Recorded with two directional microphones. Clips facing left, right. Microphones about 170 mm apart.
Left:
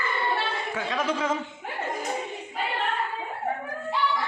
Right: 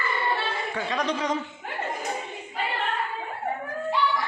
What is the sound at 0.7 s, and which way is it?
Speech, centre (ahead or behind).